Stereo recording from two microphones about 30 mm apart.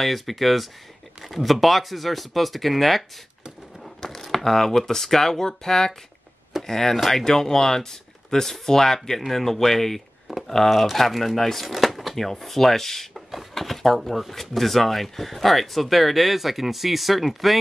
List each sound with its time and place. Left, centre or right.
0.0 s speech: centre
4.2 s speech: centre
11.6 s speech: centre